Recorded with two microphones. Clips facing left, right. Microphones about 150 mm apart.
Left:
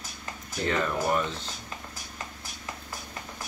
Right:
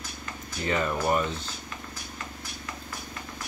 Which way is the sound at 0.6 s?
5° right (ahead or behind).